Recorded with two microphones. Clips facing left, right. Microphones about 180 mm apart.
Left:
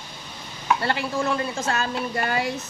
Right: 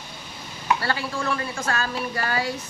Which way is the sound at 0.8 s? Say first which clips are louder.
Left 2 dB; 20° left (ahead or behind).